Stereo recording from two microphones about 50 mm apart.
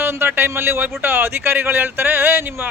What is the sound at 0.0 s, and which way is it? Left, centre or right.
Speech, right.